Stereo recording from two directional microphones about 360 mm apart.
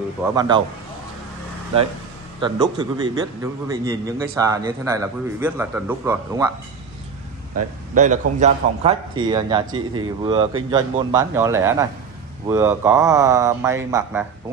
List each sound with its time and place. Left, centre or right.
0.3 s a man's voice: centre
2.4 s a man's voice: centre
7.9 s a man's voice: centre
9.7 s speech: right
10.2 s a man's voice: centre